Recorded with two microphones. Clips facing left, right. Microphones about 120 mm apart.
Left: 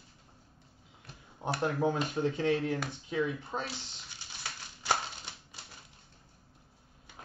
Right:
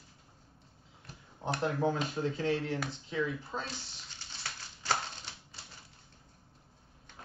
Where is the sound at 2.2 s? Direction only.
25° left (ahead or behind).